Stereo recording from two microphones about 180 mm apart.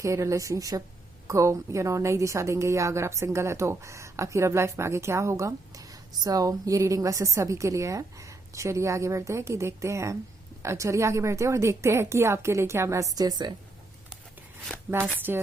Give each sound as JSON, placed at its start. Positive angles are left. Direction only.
{"t": 0.0, "sound": "a woman's voice", "side_deg": -15}
{"t": 14.7, "sound": "a sound", "side_deg": 10}
{"t": 15.3, "sound": "a woman's voice", "side_deg": -10}